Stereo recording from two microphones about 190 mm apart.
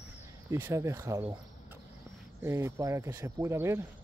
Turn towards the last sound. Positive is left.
turn(degrees=-15)  # may be behind; listen again after turning